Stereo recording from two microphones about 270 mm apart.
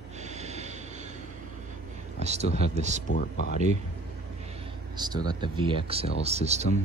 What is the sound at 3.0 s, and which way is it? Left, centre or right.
Speech, left.